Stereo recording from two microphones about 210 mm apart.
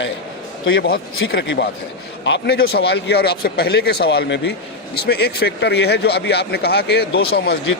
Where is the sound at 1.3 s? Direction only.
55° left (ahead or behind).